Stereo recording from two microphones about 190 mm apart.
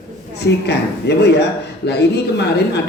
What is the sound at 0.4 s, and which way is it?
A man's voice, 60° left (ahead or behind).